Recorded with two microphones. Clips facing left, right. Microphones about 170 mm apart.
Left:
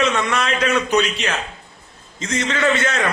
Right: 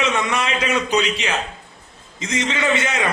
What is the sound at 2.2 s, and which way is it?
Speech, 15° right (ahead or behind).